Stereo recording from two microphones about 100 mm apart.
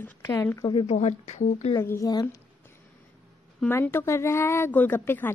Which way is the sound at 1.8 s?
30° left (ahead or behind).